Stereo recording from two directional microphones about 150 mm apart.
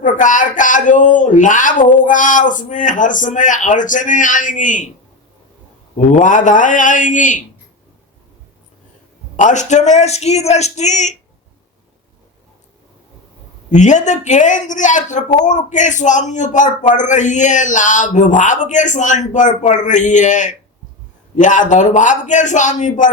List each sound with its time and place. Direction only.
0.0 s a man's voice: 60° left (ahead or behind)
6.1 s a man's voice: 60° left (ahead or behind)
9.3 s a man's voice: 55° left (ahead or behind)
13.7 s a man's voice: 55° left (ahead or behind)